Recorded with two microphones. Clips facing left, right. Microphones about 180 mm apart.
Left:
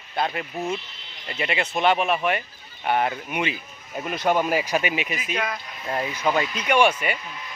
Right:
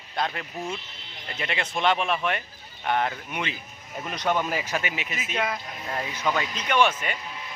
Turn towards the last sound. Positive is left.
turn(degrees=10)  # may be behind; listen again after turning